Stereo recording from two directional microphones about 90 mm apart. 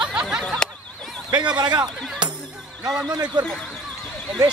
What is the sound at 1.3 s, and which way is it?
Speech, 50° right (ahead or behind).